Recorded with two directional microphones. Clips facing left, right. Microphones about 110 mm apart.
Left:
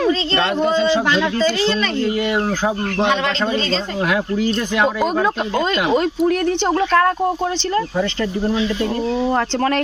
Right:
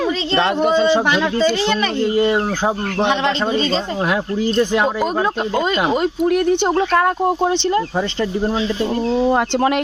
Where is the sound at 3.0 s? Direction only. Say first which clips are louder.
Right 1 dB; 20° right (ahead or behind).